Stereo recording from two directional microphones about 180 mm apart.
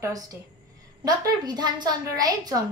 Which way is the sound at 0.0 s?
20° right (ahead or behind).